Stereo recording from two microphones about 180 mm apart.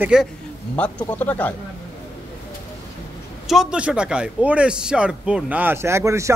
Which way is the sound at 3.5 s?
5° right (ahead or behind).